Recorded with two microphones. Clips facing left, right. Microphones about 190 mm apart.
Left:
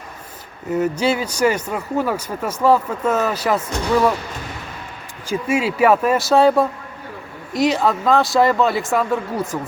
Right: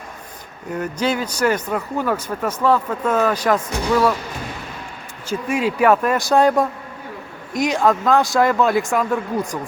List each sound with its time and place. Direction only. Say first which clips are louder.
0.7 s speech: left 3 dB; 10° left (ahead or behind)
5.3 s speech: left 1 dB; 10° left (ahead or behind)